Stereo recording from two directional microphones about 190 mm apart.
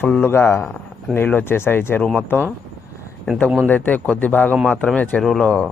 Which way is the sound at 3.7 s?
10° left (ahead or behind).